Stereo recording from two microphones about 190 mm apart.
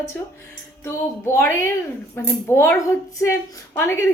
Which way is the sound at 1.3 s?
15° left (ahead or behind).